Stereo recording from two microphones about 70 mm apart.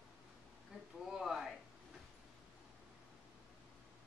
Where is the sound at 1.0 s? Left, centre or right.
Centre.